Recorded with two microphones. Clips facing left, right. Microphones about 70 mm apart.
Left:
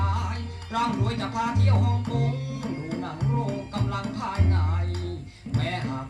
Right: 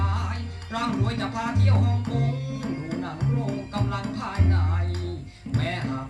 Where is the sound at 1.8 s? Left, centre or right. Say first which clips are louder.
Even; left.